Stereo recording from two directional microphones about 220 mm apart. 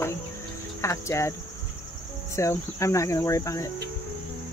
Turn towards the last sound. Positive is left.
turn(degrees=15)  # may be behind; listen again after turning